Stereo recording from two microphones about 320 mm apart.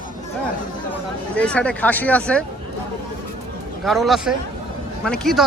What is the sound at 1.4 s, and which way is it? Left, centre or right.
Speech, centre.